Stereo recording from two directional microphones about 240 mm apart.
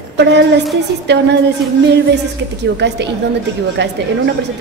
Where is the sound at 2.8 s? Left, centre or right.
Right.